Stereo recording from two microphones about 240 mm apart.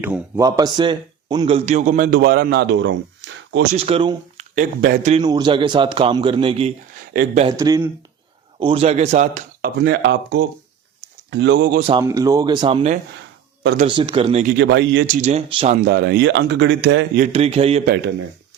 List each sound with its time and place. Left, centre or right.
0.0 s a man's voice: centre; by 3.6 s right
3.7 s speech: right
4.5 s a man's voice: right
5.1 s speech: centre; by 11.8 s right
11.8 s speech: right
14.6 s speech: right
17.3 s speech: right
17.8 s speech: right